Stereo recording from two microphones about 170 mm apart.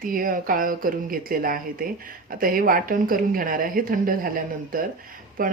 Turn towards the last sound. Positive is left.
turn(degrees=-55)  # may be behind; listen again after turning